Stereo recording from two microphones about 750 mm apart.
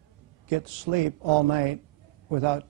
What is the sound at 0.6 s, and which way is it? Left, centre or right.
A man's voice, right.